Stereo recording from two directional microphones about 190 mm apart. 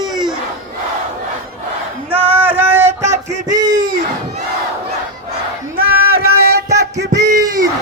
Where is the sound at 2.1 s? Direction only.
10° right (ahead or behind).